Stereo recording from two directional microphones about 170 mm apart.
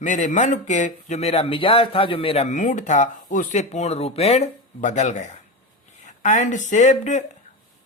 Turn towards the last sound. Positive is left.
turn(degrees=45)  # may be behind; listen again after turning